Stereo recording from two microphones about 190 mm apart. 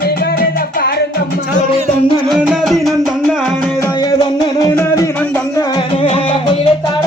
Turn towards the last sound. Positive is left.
turn(degrees=20)  # may be behind; listen again after turning